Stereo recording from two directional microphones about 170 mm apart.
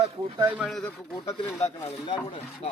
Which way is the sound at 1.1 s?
20° left (ahead or behind).